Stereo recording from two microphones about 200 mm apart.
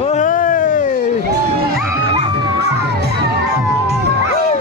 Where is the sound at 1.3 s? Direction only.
50° right (ahead or behind).